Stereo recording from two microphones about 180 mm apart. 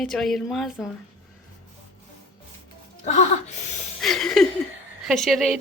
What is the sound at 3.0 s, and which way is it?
Music, 40° left (ahead or behind).